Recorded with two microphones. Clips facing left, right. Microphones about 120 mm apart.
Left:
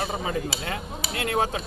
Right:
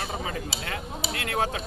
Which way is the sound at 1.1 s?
25° left (ahead or behind).